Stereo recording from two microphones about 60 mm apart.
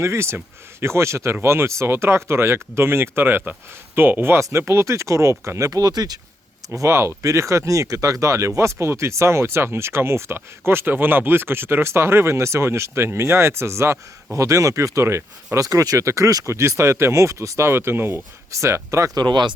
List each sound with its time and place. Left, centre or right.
0.0 s speech: right
5.6 s speech: right
6.7 s speech: right
14.3 s speech: right
15.5 s speech: right
17.7 s speech: right
18.5 s speech: right